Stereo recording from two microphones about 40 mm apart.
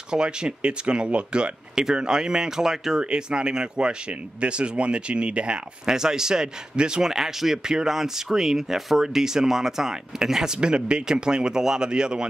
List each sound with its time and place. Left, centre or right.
0.1 s speech: right
3.0 s speech: right
5.9 s speech: centre